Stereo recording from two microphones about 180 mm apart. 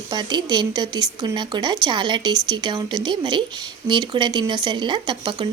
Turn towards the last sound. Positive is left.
turn(degrees=-25)  # may be behind; listen again after turning